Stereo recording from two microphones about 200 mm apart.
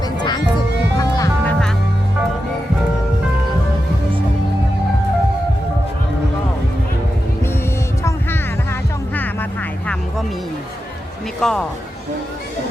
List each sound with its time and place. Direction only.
0.2 s music: 20° left (ahead or behind)
9.1 s music: 10° left (ahead or behind)
11.3 s speech: centre (ahead or behind)